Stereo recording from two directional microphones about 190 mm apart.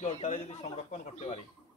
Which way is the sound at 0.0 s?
40° left (ahead or behind).